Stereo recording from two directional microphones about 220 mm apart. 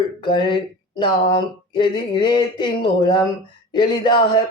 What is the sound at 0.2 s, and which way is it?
Speech, 20° left (ahead or behind).